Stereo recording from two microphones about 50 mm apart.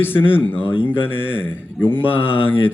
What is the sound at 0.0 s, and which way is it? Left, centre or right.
A man's voice, left.